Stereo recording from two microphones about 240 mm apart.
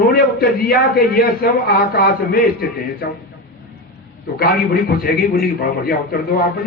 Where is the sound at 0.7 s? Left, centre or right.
Left.